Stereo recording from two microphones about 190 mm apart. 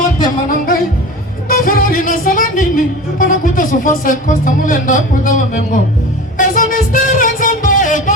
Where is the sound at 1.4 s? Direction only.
50° left (ahead or behind).